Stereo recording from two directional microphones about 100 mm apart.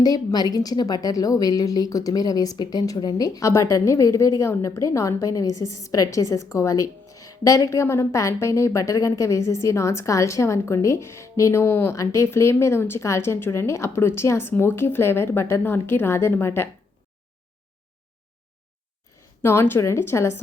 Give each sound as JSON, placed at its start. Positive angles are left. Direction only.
{"t": 0.0, "sound": "a woman's voice", "side_deg": 40}
{"t": 19.4, "sound": "a woman's voice", "side_deg": 25}